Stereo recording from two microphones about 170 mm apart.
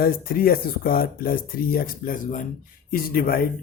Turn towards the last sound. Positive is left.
turn(degrees=60)  # may be behind; listen again after turning